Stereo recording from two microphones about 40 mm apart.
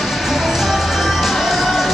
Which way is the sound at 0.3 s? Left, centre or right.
Centre.